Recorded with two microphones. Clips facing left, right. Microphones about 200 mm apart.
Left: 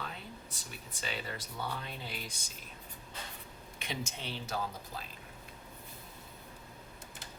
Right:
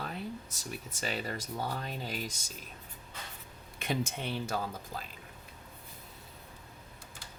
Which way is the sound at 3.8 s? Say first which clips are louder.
Right 7 dB; 55° right (ahead or behind).